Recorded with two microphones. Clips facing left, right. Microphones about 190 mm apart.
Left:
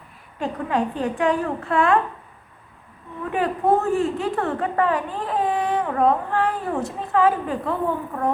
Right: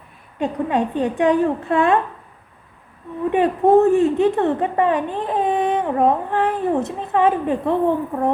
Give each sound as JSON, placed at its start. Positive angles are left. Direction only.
{"t": 0.3, "sound": "speech", "side_deg": -20}
{"t": 3.2, "sound": "speech", "side_deg": -25}